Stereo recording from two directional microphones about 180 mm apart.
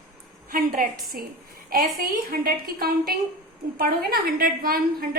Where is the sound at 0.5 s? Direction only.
50° right (ahead or behind).